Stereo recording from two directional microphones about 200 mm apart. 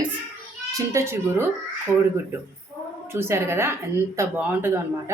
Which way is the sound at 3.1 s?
10° right (ahead or behind).